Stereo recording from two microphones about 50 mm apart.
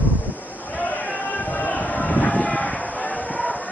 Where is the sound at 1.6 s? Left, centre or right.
Left.